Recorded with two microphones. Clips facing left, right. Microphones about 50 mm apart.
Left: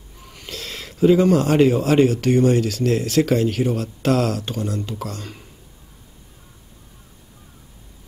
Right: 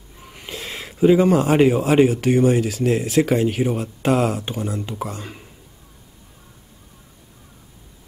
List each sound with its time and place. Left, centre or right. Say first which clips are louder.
0.2 s speech: right 1 dB; centre